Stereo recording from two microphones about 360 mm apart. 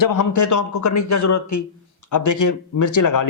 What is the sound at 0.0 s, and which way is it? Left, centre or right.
A man's voice, left.